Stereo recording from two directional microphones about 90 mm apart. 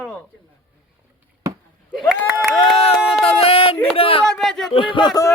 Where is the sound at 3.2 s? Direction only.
90° left.